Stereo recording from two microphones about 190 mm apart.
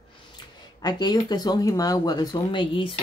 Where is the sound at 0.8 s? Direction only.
20° left (ahead or behind).